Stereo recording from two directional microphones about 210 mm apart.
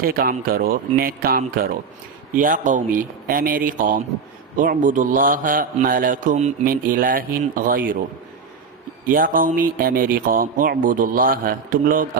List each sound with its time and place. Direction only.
0.0 s a man's voice: 45° right (ahead or behind)
9.0 s a man's voice: 40° right (ahead or behind)